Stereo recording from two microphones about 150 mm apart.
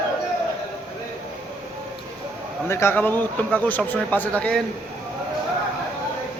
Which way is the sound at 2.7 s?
15° left (ahead or behind).